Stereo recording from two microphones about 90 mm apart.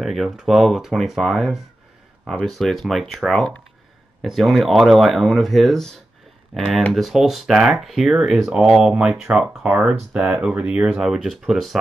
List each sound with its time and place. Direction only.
0.0 s speech: centre (ahead or behind)